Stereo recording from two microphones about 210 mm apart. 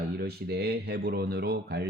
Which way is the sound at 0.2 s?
50° right (ahead or behind).